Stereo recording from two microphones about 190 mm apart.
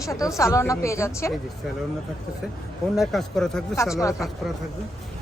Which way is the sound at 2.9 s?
Centre (ahead or behind).